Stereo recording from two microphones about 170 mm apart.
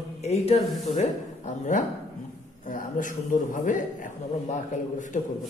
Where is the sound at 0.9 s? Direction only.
45° left (ahead or behind).